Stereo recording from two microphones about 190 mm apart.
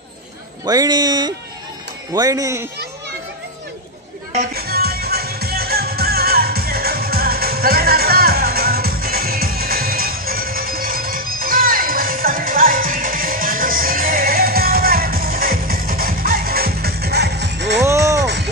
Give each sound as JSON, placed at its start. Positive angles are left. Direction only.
{"t": 0.7, "sound": "speech", "side_deg": -20}
{"t": 4.6, "sound": "music", "side_deg": -55}
{"t": 17.8, "sound": "music", "side_deg": -15}
{"t": 18.2, "sound": "a sound", "side_deg": -65}